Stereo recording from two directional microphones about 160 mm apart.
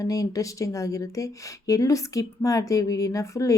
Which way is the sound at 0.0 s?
20° left (ahead or behind).